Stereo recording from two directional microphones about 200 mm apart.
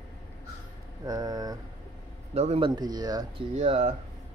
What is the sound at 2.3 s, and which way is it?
Speech, 30° right (ahead or behind).